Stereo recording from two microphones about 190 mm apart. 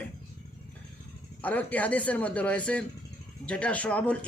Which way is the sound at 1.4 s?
10° left (ahead or behind).